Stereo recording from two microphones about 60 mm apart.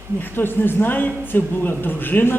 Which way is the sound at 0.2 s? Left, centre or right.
Left.